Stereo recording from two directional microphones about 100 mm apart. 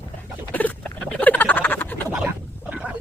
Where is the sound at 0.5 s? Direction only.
15° left (ahead or behind).